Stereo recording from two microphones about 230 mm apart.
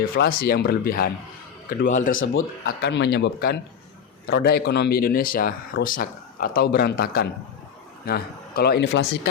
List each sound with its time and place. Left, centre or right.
0.0 s speech: left
2.6 s a man's voice: left